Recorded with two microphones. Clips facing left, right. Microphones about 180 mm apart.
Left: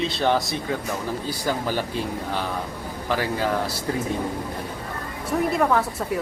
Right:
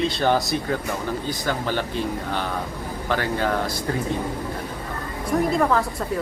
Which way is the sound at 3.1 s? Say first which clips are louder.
Even; 5° left (ahead or behind).